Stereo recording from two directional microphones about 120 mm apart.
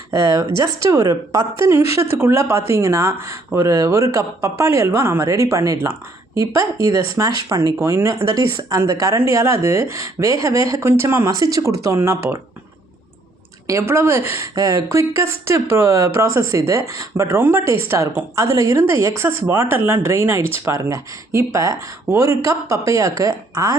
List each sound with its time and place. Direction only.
0.1 s speech: 25° right (ahead or behind)
13.7 s speech: 25° right (ahead or behind)